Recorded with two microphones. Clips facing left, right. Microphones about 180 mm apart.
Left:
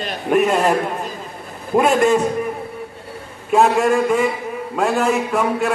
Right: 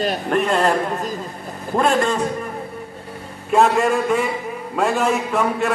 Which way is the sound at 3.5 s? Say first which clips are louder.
Left 1 dB; 5° left (ahead or behind).